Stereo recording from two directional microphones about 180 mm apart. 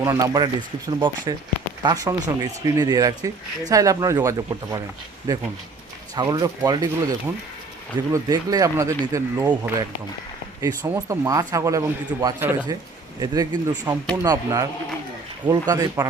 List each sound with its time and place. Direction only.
0.0 s speech: 20° right (ahead or behind)